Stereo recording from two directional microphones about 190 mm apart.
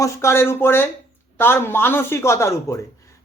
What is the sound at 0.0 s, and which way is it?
A man's voice, 15° left (ahead or behind).